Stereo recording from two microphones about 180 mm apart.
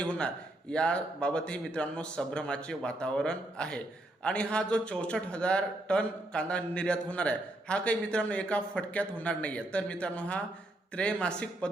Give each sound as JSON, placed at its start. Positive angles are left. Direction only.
{"t": 0.0, "sound": "a man's voice", "side_deg": 5}